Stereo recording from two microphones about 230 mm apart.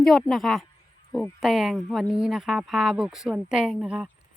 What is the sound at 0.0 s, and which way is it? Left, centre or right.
Speech, centre.